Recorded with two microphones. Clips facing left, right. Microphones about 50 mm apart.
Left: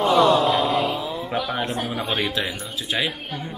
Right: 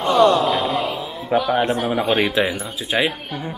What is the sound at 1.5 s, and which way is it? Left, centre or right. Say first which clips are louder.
Speech: right 7 dB; right.